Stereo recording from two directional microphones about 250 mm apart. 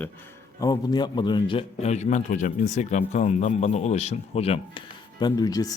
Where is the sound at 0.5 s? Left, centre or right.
Centre.